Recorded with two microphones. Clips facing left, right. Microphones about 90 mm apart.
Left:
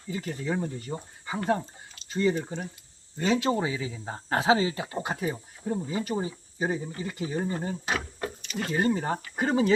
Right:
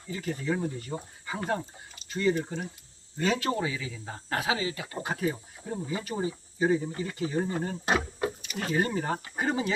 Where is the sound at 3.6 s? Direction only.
30° left (ahead or behind).